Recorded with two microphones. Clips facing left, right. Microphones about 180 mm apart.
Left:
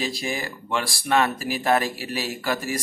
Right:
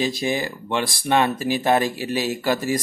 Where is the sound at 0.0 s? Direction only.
20° right (ahead or behind).